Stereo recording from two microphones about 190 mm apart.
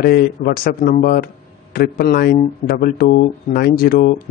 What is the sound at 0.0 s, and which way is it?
A man's voice, 50° left (ahead or behind).